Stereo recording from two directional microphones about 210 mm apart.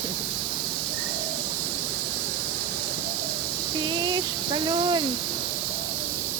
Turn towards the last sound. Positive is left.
turn(degrees=-20)  # may be behind; listen again after turning